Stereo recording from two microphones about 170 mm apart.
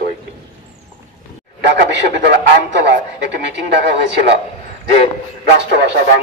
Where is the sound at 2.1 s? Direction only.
90° right.